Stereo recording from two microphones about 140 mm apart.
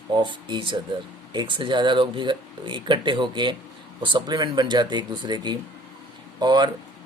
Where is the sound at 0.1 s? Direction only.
35° right (ahead or behind).